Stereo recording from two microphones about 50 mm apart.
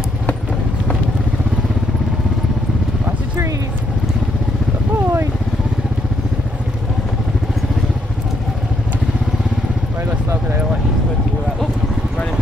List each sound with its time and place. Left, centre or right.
4.9 s vehicle: right